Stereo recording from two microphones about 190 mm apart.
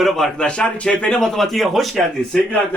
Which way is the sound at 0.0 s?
Centre (ahead or behind).